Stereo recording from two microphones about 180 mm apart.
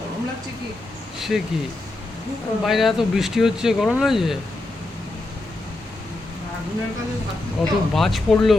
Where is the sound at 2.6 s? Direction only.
Centre (ahead or behind).